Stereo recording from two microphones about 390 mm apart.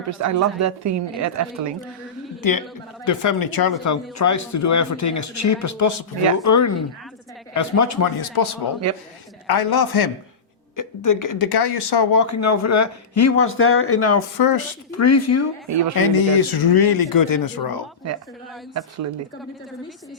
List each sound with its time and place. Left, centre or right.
0.1 s a woman's voice: right
2.4 s speech: left
8.2 s speech: left
10.8 s speech: left
12.1 s speech: left
14.3 s speech: left
14.8 s speech: left
16.0 s speech: left